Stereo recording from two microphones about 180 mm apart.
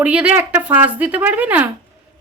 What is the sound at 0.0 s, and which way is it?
A woman's voice, 5° right (ahead or behind).